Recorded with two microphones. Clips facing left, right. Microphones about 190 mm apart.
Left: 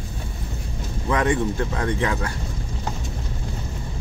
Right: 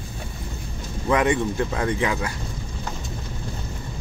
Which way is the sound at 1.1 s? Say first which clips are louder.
Right 1 dB; 15° right (ahead or behind).